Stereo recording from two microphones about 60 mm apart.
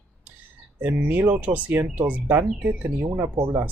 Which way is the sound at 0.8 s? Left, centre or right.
Right.